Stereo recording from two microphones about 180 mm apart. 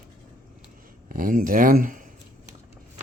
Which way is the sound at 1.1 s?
50° right (ahead or behind).